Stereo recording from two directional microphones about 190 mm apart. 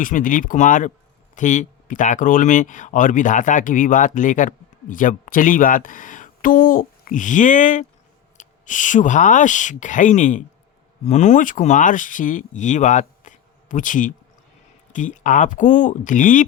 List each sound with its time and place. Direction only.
0.0 s speech: 45° left (ahead or behind)